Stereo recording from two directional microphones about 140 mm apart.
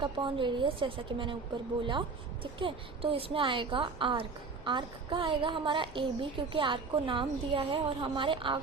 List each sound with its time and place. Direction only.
0.0 s a woman's voice: 35° right (ahead or behind)